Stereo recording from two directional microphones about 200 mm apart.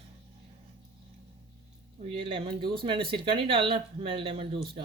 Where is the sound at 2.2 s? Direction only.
25° right (ahead or behind).